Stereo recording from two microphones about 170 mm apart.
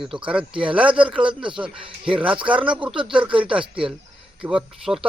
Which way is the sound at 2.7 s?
5° right (ahead or behind).